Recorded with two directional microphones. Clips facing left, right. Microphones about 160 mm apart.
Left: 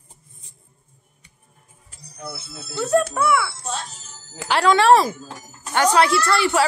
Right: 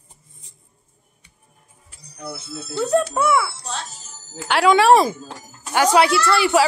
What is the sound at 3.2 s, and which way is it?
Speech, 25° right (ahead or behind).